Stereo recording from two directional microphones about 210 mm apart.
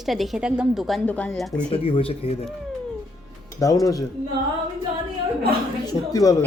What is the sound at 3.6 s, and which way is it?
Speech, 15° left (ahead or behind).